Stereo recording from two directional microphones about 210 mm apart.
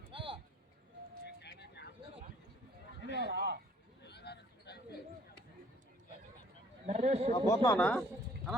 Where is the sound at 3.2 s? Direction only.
55° right (ahead or behind).